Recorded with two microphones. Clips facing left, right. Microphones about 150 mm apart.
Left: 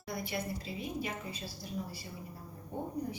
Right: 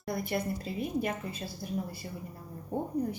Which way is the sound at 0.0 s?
50° right (ahead or behind).